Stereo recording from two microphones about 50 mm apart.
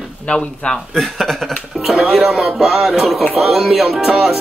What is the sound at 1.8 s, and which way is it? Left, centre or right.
Speech, centre.